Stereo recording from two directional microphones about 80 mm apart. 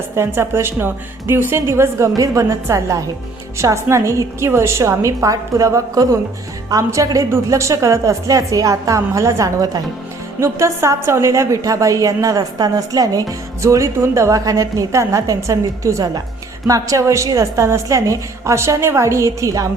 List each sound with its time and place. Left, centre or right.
0.2 s a woman's voice: right
13.6 s a woman's voice: right